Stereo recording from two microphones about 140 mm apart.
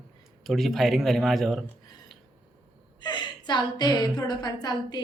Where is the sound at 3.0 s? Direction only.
30° left (ahead or behind).